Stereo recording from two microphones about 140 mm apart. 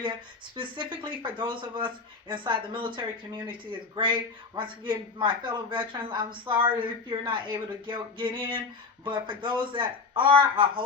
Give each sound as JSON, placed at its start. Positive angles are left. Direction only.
{"t": 0.5, "sound": "speech", "side_deg": -35}